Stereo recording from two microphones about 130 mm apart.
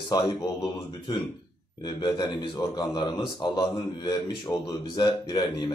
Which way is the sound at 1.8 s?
35° left (ahead or behind).